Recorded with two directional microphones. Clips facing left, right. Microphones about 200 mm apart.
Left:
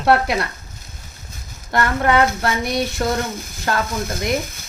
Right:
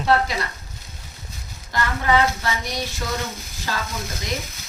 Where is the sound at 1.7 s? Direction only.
60° left (ahead or behind).